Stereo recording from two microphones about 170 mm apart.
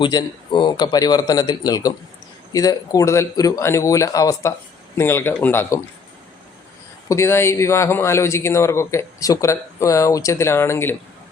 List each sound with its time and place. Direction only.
0.0 s a man's voice: 25° left (ahead or behind)
7.1 s a man's voice: 15° left (ahead or behind)